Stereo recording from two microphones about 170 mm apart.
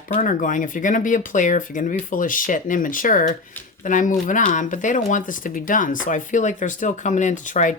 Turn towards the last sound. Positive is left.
turn(degrees=50)  # may be behind; listen again after turning